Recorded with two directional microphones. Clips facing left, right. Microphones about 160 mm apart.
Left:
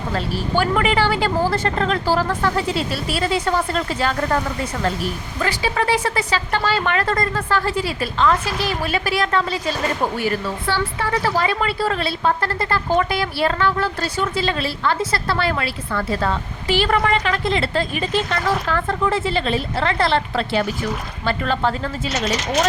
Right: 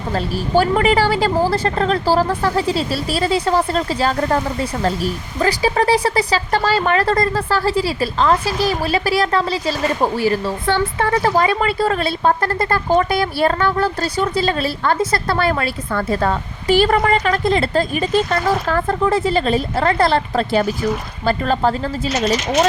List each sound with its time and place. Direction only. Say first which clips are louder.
0.1 s speech: right 5 dB; 35° right (ahead or behind)
10.7 s speech: right 5 dB; 45° right (ahead or behind)